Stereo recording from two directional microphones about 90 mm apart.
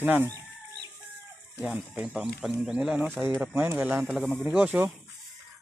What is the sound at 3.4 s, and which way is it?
Speech, 20° right (ahead or behind).